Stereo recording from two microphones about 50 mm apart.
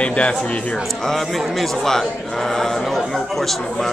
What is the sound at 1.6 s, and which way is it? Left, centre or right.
Speech, centre.